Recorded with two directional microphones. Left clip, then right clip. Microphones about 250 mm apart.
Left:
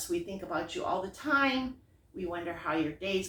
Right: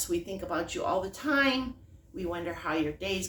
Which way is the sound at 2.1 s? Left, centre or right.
Right.